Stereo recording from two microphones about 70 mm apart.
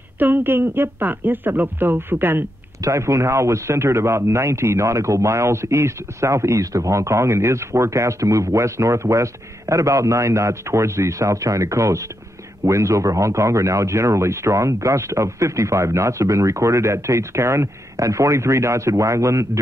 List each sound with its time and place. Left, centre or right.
0.2 s speech: right
2.8 s a man's voice: right